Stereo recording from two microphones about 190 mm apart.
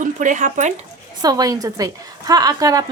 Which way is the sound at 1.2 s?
20° right (ahead or behind).